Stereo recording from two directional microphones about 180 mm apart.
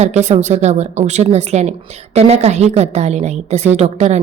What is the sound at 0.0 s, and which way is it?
A woman's voice, 40° right (ahead or behind).